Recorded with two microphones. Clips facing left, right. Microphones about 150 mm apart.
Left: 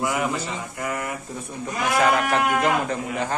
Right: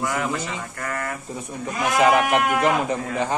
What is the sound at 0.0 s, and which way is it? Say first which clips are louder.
A man's voice: left 1 dB; 15° left (ahead or behind).